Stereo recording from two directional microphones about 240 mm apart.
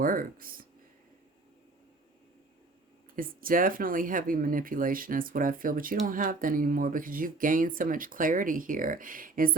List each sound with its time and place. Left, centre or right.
0.0 s speech: right
3.2 s speech: right